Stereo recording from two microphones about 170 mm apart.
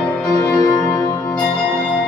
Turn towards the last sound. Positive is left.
turn(degrees=20)  # may be behind; listen again after turning